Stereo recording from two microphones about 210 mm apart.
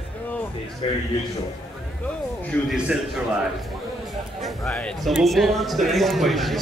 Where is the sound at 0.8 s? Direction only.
30° left (ahead or behind).